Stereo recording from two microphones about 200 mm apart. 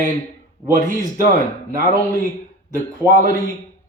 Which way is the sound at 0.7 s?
40° right (ahead or behind).